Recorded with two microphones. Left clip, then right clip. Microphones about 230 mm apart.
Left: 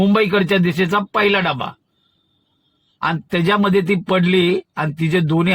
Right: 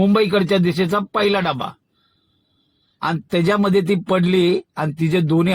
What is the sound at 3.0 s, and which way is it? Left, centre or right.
Speech, left.